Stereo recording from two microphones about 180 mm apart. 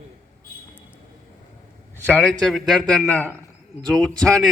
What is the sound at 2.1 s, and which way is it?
A man's voice, 5° left (ahead or behind).